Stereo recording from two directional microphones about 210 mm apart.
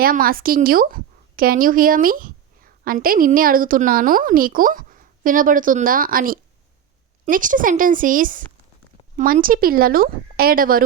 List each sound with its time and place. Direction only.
0.0 s a woman's voice: 45° right (ahead or behind)